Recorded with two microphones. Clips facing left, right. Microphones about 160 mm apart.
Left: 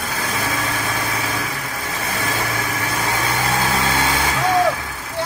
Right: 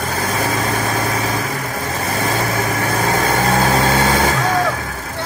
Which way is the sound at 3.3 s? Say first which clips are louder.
Right 5 dB; 50° right (ahead or behind).